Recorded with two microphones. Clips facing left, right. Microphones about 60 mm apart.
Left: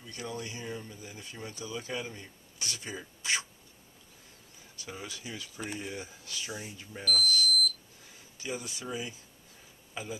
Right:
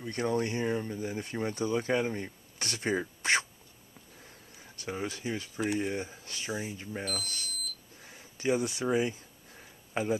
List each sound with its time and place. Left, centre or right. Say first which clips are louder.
0.0 s speech: right 9 dB; right
4.7 s speech: right 7 dB; right
7.2 s smoke detector: left 12 dB; right
8.1 s speech: right 9 dB; right